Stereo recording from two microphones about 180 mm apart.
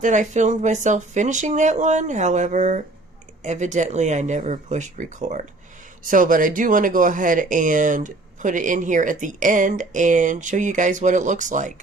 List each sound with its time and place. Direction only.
0.0 s speech: 45° right (ahead or behind)